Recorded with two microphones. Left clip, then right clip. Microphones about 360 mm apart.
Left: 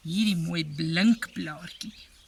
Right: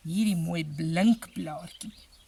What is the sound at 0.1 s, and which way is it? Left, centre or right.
Speech, centre.